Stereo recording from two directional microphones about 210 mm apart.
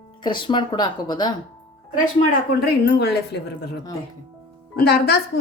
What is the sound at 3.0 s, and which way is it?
Speech, 50° left (ahead or behind).